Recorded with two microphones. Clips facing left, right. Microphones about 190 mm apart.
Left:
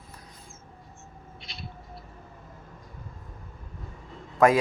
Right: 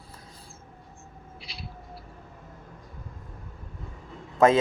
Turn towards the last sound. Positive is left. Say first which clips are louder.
# right 1 dB
turn(degrees=-25)  # may be behind; listen again after turning